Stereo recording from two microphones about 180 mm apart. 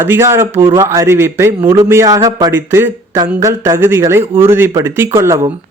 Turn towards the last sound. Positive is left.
turn(degrees=-15)  # may be behind; listen again after turning